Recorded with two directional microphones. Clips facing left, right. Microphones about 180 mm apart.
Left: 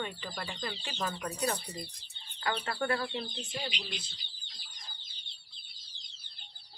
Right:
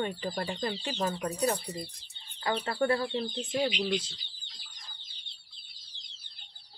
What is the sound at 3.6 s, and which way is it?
Speech, 60° right (ahead or behind).